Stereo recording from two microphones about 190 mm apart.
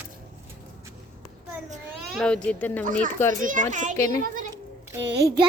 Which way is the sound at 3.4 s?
40° right (ahead or behind).